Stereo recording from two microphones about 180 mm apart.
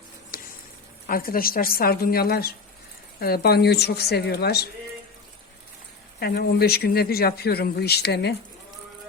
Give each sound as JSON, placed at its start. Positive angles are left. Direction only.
{"t": 0.3, "sound": "a sound", "side_deg": 55}
{"t": 1.0, "sound": "speech", "side_deg": 55}
{"t": 6.1, "sound": "speech", "side_deg": 60}